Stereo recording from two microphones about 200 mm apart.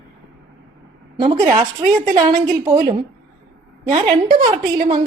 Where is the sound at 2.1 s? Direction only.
20° right (ahead or behind).